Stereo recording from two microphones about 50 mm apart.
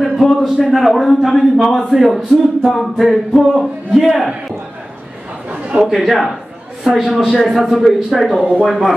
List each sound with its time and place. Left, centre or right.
0.0 s music: centre
5.8 s music: centre
6.8 s a man's voice: centre
7.3 s music: centre